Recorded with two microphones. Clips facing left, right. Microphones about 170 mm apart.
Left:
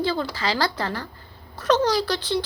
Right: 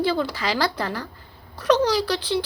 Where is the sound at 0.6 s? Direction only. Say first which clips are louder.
Right 1 dB; 10° right (ahead or behind).